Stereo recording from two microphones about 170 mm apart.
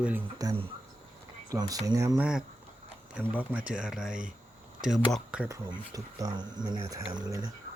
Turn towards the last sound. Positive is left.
turn(degrees=-25)  # may be behind; listen again after turning